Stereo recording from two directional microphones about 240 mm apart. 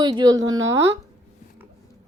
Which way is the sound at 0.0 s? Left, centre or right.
Centre.